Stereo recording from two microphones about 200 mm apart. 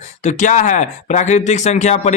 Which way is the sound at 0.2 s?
40° left (ahead or behind).